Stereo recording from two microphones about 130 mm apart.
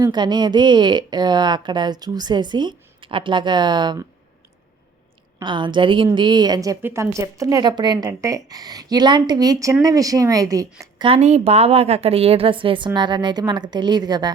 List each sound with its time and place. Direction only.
0.0 s a woman's voice: 35° right (ahead or behind)
5.4 s a woman's voice: 40° right (ahead or behind)
11.0 s a woman's voice: 55° right (ahead or behind); by 14.3 s 30° right (ahead or behind)